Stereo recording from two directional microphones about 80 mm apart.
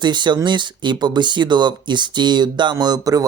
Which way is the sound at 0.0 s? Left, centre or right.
Right.